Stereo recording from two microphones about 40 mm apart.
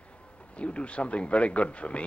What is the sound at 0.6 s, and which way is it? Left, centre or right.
A woman's voice, left.